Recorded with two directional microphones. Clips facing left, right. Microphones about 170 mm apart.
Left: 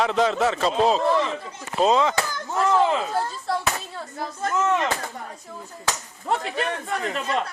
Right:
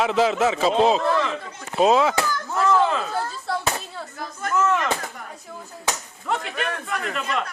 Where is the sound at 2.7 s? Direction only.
20° left (ahead or behind).